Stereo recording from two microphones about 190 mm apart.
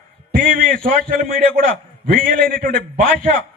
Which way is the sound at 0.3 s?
50° right (ahead or behind).